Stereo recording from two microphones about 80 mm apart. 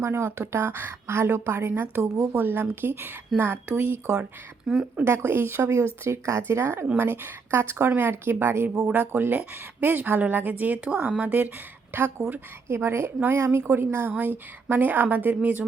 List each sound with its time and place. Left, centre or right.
0.0 s a woman's voice: right
4.6 s speech: centre
5.0 s a woman's voice: right
11.9 s a woman's voice: right